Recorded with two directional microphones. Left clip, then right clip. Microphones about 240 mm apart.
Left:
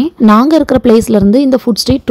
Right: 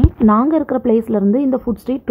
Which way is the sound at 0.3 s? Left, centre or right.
Left.